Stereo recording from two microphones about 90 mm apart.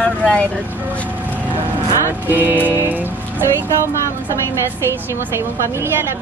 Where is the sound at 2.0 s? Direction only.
25° right (ahead or behind).